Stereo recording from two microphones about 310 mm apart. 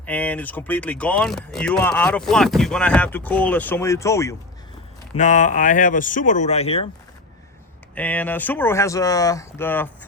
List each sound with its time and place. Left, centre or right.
0.0 s speech: centre
5.1 s speech: left
7.9 s speech: centre